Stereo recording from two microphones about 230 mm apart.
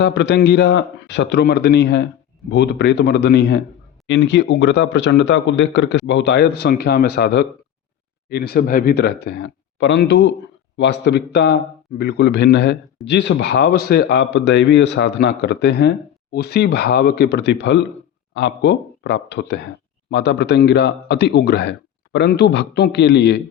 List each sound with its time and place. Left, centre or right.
0.0 s a man's voice: left